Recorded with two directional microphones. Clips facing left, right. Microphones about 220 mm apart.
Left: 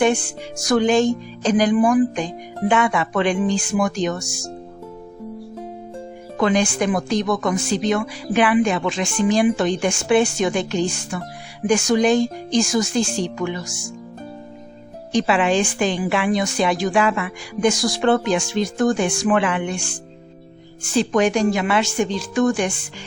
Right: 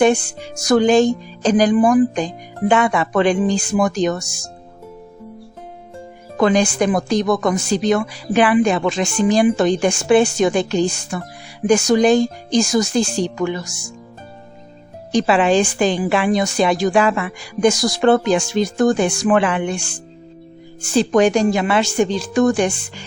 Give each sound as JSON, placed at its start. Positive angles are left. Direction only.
{"t": 0.0, "sound": "a woman's voice", "side_deg": -40}
{"t": 6.3, "sound": "a woman's voice", "side_deg": -40}
{"t": 15.1, "sound": "a woman's voice", "side_deg": -35}
{"t": 20.9, "sound": "a woman's voice", "side_deg": -35}